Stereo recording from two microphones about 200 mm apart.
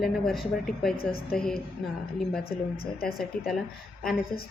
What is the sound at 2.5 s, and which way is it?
Speech, 50° left (ahead or behind).